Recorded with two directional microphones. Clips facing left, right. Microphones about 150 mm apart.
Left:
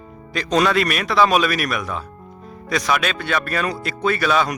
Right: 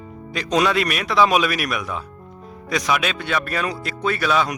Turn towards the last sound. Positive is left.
turn(degrees=-5)  # may be behind; listen again after turning